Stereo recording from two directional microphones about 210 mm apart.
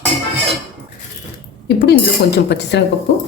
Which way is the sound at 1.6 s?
50° left (ahead or behind).